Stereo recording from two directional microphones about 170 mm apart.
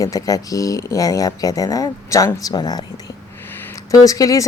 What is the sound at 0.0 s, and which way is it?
Speech, 20° left (ahead or behind).